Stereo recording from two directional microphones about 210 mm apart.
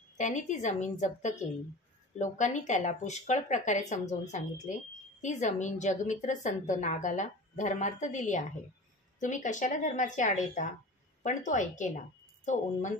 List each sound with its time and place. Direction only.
0.2 s a woman's voice: 35° left (ahead or behind)